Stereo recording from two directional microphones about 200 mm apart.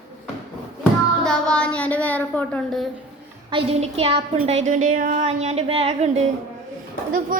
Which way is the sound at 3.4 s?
30° right (ahead or behind).